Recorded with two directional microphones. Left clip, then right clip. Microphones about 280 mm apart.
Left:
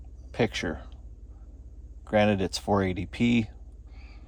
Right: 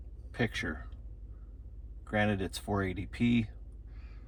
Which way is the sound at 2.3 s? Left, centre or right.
Centre.